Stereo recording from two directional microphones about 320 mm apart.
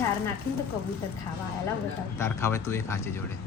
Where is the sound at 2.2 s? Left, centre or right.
Centre.